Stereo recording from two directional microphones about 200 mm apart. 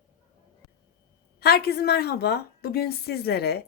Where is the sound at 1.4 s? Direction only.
50° left (ahead or behind).